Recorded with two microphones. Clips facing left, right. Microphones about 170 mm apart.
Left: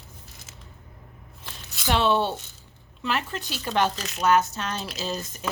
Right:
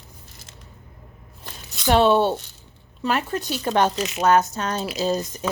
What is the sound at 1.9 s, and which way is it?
Speech, 45° right (ahead or behind).